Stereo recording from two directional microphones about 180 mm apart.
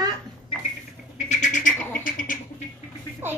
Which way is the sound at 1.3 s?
40° left (ahead or behind).